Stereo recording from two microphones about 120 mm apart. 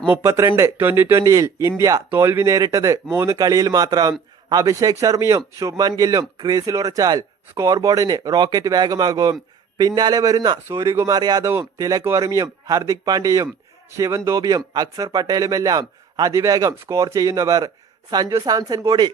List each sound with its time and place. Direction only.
0.1 s a man's voice: 25° right (ahead or behind)